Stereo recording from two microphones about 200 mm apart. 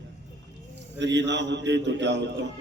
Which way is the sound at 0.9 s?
60° right (ahead or behind).